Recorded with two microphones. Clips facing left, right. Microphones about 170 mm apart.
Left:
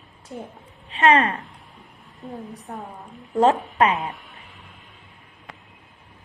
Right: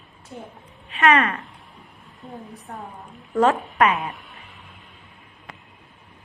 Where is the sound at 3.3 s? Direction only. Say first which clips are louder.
Left 1 dB; 25° left (ahead or behind).